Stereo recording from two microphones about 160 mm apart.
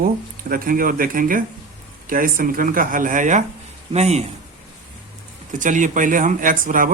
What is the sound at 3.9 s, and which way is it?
Speech, 45° right (ahead or behind).